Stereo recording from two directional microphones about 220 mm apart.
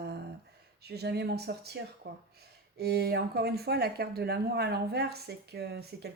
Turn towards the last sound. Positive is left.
turn(degrees=-45)  # may be behind; listen again after turning